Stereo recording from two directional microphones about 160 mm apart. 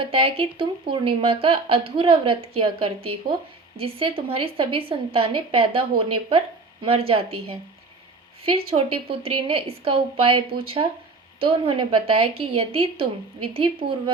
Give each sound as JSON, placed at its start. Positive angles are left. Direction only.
{"t": 0.0, "sound": "speech", "side_deg": -35}
{"t": 8.4, "sound": "speech", "side_deg": -35}